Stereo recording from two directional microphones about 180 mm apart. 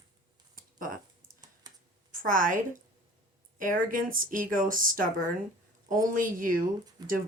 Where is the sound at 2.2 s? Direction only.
50° right (ahead or behind).